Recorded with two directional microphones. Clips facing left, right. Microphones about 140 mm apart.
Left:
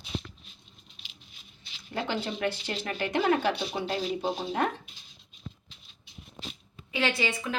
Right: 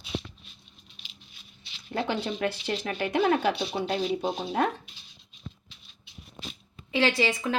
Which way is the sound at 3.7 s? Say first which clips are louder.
Right 3 dB; 5° right (ahead or behind).